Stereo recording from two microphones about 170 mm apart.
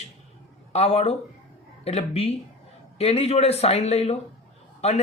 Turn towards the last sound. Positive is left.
turn(degrees=40)  # may be behind; listen again after turning